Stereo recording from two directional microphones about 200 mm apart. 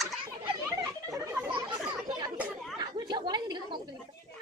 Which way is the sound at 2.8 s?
20° right (ahead or behind).